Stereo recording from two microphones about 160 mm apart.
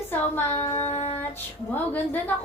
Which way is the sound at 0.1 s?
15° left (ahead or behind).